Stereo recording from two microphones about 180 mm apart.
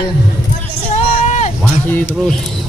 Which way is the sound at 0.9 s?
40° left (ahead or behind).